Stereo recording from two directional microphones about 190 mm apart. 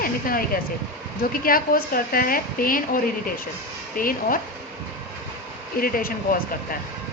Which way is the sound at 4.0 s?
50° left (ahead or behind).